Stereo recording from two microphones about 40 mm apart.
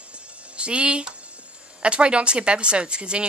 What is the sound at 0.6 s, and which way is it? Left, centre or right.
Music, right.